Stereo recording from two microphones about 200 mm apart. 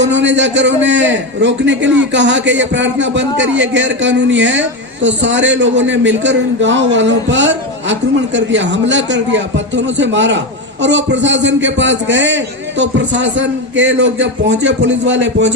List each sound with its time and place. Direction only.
0.0 s a man's voice: 65° right (ahead or behind)